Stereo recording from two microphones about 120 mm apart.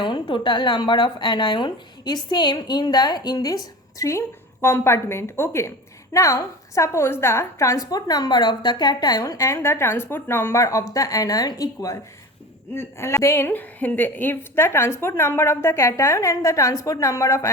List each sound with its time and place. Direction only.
0.0 s a woman's voice: 40° left (ahead or behind); by 17.5 s 25° left (ahead or behind)